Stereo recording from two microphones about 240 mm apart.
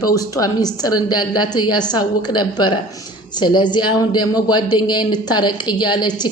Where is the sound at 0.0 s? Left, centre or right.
Centre.